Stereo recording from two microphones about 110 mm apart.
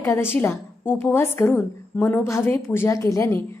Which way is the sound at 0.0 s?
25° left (ahead or behind).